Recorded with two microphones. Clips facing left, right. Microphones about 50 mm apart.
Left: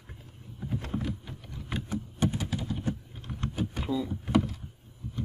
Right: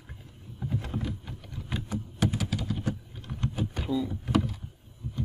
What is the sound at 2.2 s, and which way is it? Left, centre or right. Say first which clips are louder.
Typing: right 1 dB; right.